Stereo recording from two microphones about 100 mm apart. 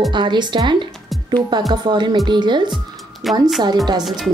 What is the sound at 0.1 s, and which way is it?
A woman's voice, 50° right (ahead or behind).